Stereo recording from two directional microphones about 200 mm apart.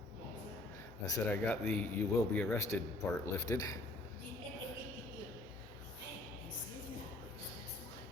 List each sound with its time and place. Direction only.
1.0 s a man's voice: 20° left (ahead or behind)
1.5 s a man's voice: 5° left (ahead or behind)